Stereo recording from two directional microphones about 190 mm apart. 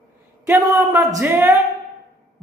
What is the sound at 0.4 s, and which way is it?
A man's voice, 15° right (ahead or behind).